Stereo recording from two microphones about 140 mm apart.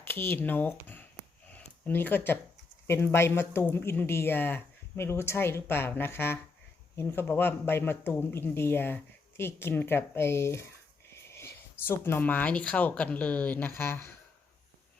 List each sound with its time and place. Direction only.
0.0 s speech: 15° left (ahead or behind)